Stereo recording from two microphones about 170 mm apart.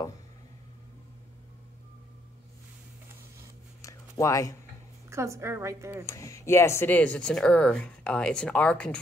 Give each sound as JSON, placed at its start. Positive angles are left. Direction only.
{"t": 3.8, "sound": "a sound", "side_deg": 20}
{"t": 5.1, "sound": "a woman's voice", "side_deg": -15}
{"t": 6.0, "sound": "speech", "side_deg": 20}